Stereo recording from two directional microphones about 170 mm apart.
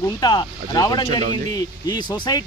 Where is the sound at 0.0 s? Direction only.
25° left (ahead or behind).